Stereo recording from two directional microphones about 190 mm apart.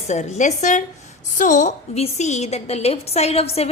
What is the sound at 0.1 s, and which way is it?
A woman's voice, 40° left (ahead or behind).